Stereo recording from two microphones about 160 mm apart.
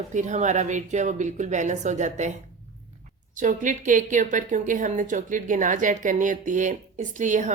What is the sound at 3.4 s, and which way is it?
Speech, 55° right (ahead or behind).